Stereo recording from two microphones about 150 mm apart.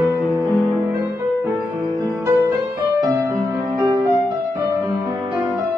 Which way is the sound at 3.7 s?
25° right (ahead or behind).